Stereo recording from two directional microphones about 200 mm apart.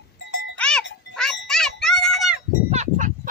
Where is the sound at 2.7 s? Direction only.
35° right (ahead or behind).